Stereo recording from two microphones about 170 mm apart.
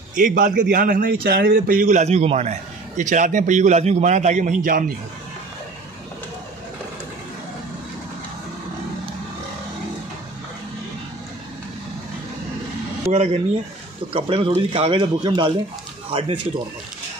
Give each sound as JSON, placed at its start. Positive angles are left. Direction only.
{"t": 0.2, "sound": "a man's voice", "side_deg": -50}
{"t": 13.1, "sound": "speech", "side_deg": -40}